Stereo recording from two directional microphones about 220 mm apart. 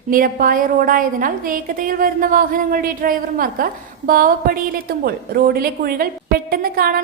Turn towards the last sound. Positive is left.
turn(degrees=-40)  # may be behind; listen again after turning